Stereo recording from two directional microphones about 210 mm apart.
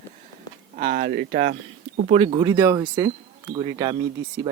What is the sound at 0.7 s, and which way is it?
Speech, 45° right (ahead or behind).